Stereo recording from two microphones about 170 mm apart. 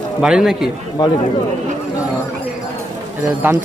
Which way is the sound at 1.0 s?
20° left (ahead or behind).